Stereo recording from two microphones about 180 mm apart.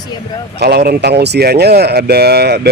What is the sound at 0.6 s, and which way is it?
A man's voice, 60° right (ahead or behind).